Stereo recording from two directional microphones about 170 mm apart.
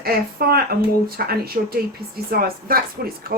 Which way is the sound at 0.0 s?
65° right (ahead or behind).